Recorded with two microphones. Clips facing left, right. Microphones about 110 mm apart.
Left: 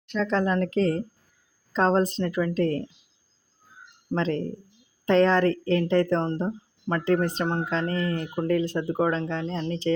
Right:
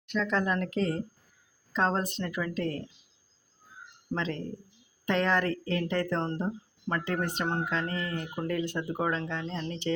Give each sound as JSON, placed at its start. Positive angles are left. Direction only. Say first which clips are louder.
{"t": 0.1, "sound": "speech", "louder": "left 4 dB", "side_deg": 35}
{"t": 4.1, "sound": "speech", "louder": "left 7 dB", "side_deg": 35}